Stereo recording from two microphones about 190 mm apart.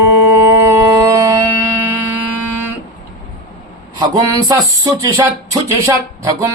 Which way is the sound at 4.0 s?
20° right (ahead or behind).